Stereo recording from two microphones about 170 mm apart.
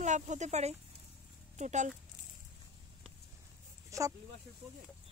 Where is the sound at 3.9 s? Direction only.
20° right (ahead or behind).